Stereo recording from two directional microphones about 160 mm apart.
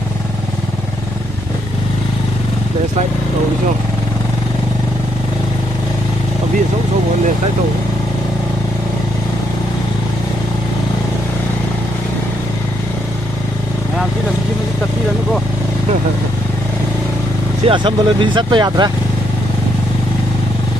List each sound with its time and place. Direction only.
17.6 s speech: 30° right (ahead or behind)